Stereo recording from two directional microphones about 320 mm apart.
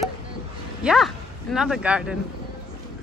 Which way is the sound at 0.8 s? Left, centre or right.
Centre.